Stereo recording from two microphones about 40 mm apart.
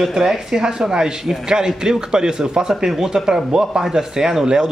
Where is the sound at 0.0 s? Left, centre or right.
Centre.